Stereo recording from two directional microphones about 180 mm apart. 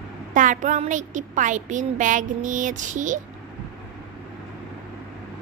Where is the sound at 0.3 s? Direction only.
45° right (ahead or behind).